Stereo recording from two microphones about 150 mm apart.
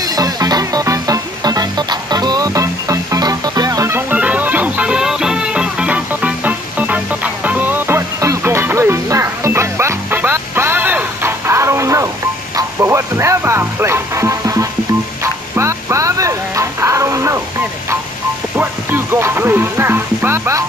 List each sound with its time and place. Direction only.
0.0 s music: 25° right (ahead or behind)
18.6 s music: 15° right (ahead or behind)